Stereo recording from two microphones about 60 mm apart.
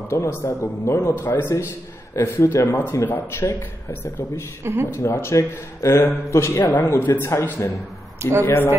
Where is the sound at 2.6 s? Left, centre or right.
Left.